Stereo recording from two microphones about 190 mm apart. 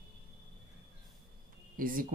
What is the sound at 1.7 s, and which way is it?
Speech, 45° right (ahead or behind).